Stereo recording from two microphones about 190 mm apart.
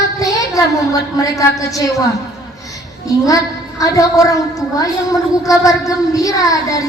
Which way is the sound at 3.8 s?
15° left (ahead or behind).